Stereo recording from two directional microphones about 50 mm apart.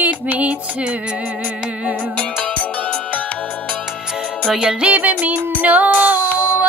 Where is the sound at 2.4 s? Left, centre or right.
Left.